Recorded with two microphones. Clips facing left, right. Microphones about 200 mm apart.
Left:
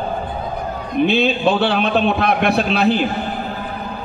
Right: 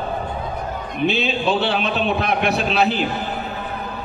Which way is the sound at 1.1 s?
55° left (ahead or behind).